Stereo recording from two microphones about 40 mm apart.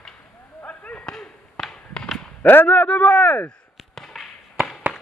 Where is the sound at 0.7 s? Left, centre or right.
Left.